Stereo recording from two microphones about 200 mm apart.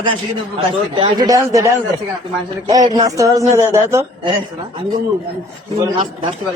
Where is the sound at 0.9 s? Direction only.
25° right (ahead or behind).